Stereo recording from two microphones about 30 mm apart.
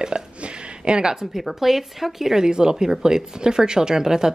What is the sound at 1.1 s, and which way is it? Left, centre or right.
Speech, centre.